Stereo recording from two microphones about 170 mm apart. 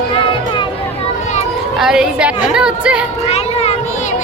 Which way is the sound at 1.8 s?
5° right (ahead or behind).